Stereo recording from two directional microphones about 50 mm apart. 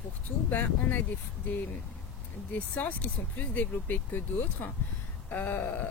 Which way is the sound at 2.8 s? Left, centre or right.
Left.